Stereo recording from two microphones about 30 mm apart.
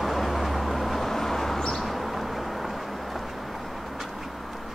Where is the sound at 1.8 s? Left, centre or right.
Centre.